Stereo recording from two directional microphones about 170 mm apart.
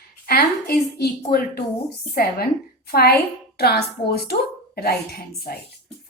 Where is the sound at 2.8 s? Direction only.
65° left (ahead or behind).